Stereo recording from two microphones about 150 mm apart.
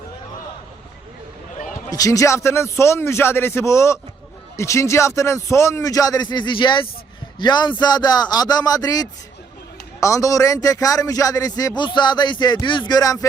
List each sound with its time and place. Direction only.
1.9 s a man's voice: 20° left (ahead or behind)